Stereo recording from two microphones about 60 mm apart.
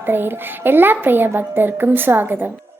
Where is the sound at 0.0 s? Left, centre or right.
Right.